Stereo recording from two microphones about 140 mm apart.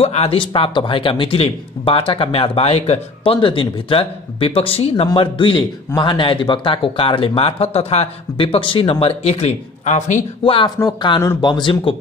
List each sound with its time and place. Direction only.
0.0 s speech: 45° left (ahead or behind)
10.4 s speech: 40° left (ahead or behind)